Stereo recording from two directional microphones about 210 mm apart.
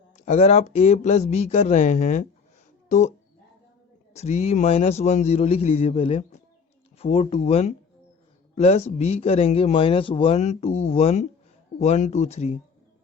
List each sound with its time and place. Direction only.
0.2 s speech: 35° left (ahead or behind)
4.1 s speech: 30° left (ahead or behind)